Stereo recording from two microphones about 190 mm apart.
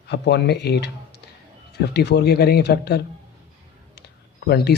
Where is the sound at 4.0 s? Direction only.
60° left (ahead or behind).